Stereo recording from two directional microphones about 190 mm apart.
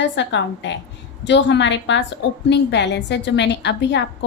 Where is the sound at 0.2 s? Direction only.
70° left (ahead or behind).